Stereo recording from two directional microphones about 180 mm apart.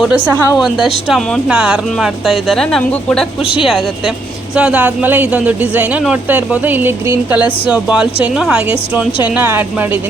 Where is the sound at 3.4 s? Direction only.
30° left (ahead or behind).